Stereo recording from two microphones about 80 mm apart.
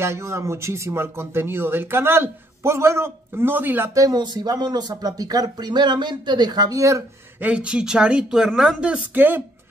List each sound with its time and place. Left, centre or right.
0.0 s speech: right
3.9 s speech: right
4.2 s speech: right
7.4 s speech: centre
8.9 s speech: right